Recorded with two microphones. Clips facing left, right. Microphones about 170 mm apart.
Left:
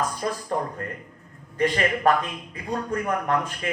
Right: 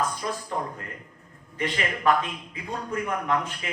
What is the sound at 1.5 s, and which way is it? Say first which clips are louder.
A man's voice: left 6 dB; 45° left (ahead or behind).